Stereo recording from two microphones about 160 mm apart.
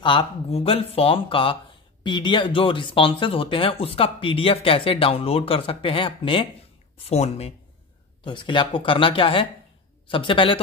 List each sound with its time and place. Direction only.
0.0 s speech: 30° left (ahead or behind)